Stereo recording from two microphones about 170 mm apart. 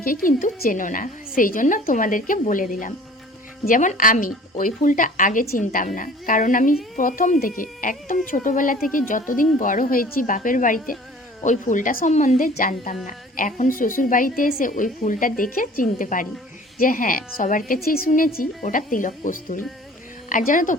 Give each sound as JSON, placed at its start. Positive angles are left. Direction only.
{"t": 0.0, "sound": "a woman's voice", "side_deg": 55}